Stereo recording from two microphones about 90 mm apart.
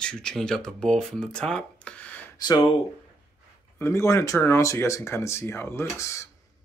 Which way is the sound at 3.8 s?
30° left (ahead or behind).